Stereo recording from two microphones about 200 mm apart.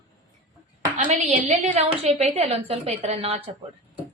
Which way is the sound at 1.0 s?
35° right (ahead or behind).